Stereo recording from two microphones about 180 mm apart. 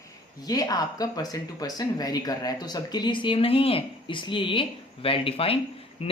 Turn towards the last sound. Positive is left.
turn(degrees=35)  # may be behind; listen again after turning